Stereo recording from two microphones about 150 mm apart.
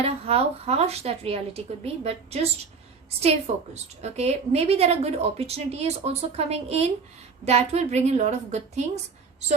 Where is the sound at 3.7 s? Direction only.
45° right (ahead or behind).